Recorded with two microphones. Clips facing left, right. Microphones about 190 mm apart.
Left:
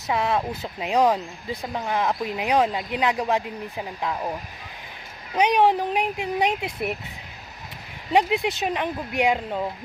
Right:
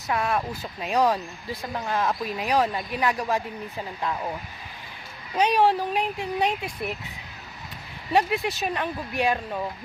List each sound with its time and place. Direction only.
0.1 s speech: 20° left (ahead or behind)
5.4 s speech: 20° left (ahead or behind)
8.1 s speech: 20° left (ahead or behind)